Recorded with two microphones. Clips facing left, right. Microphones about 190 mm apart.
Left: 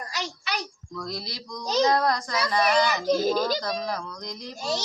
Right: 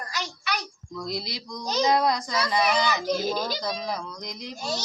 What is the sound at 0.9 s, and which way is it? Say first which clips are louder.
Speech: right 2 dB; 20° right (ahead or behind).